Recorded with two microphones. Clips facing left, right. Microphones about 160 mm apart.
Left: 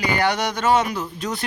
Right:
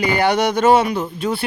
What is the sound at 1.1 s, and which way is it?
Speech, 5° right (ahead or behind).